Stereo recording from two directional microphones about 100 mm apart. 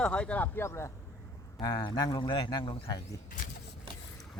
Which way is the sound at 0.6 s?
25° left (ahead or behind).